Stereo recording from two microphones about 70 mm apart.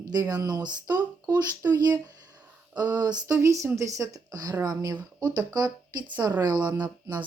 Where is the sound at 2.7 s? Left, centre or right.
Right.